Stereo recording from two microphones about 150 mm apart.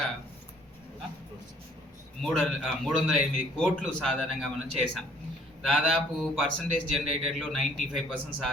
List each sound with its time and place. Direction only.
2.2 s a man's voice: centre (ahead or behind)